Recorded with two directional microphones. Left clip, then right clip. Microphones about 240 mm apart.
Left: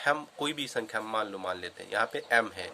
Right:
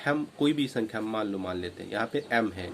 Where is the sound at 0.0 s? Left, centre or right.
Centre.